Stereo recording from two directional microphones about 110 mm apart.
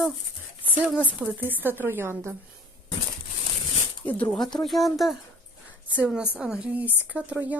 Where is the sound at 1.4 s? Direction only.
15° right (ahead or behind).